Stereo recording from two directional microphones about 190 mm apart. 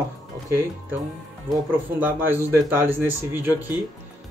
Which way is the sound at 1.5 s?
10° right (ahead or behind).